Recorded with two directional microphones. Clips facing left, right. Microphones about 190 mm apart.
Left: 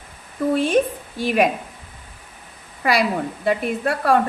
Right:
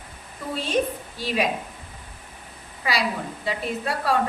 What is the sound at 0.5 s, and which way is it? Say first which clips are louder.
Speech: left 5 dB; 55° left (ahead or behind).